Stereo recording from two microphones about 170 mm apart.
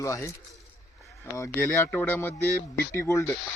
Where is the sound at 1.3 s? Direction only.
15° left (ahead or behind).